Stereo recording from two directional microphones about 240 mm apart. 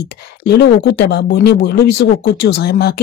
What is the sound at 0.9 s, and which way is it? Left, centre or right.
Speech, left.